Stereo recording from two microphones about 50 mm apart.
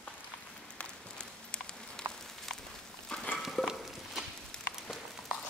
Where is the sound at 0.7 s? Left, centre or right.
Centre.